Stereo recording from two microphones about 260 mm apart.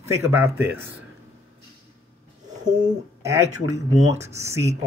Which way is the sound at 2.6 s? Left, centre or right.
Centre.